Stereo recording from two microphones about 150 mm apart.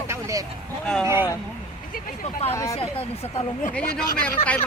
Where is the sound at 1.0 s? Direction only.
15° right (ahead or behind).